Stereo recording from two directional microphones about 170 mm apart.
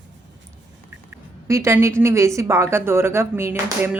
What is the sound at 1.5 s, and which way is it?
A woman's voice, 15° right (ahead or behind).